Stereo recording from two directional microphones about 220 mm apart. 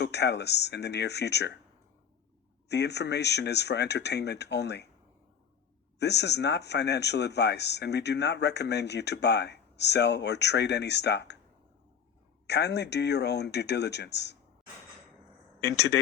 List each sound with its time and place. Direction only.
0.0 s speech: 50° left (ahead or behind)
2.6 s speech: 50° left (ahead or behind)
6.0 s speech: 50° left (ahead or behind)
12.5 s speech: 50° left (ahead or behind)
15.6 s speech: 50° left (ahead or behind)